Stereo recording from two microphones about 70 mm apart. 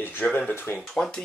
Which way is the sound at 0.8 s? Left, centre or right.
Centre.